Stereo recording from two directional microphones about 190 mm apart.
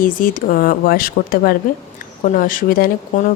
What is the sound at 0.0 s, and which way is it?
Speech, 45° left (ahead or behind).